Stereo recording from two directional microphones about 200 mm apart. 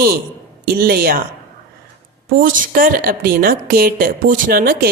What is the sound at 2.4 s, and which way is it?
A woman's voice, 40° right (ahead or behind).